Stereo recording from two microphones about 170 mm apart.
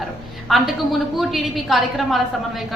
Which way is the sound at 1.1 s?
Centre (ahead or behind).